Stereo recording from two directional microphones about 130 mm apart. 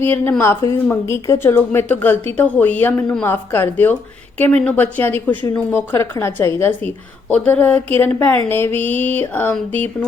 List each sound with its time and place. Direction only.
0.0 s a woman's voice: 15° left (ahead or behind)